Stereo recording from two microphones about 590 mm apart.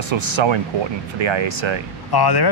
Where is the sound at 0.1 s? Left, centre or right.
Right.